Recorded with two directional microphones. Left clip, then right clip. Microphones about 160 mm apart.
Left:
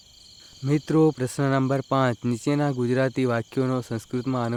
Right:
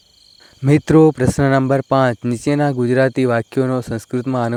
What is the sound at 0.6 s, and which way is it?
Speech, 45° right (ahead or behind).